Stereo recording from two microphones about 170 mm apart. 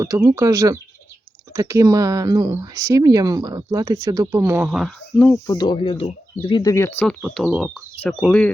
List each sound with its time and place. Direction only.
0.0 s speech: 20° right (ahead or behind); by 5.4 s 5° left (ahead or behind)
5.5 s speech: 25° left (ahead or behind); by 7.2 s 10° left (ahead or behind)
7.2 s speech: 5° right (ahead or behind)